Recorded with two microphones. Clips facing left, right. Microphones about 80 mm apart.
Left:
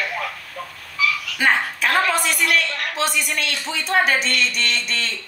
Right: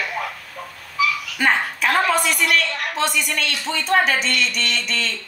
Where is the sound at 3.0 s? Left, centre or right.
Centre.